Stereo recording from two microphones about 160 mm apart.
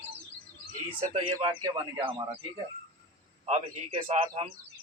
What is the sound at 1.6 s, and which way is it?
Speech, 35° right (ahead or behind).